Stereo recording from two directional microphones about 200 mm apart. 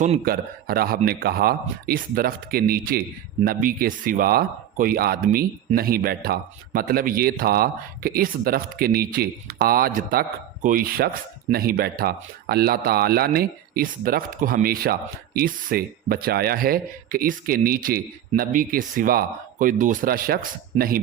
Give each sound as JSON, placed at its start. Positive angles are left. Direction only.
{"t": 0.3, "sound": "speech", "side_deg": -50}